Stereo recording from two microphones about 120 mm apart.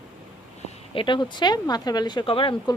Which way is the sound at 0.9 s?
45° left (ahead or behind).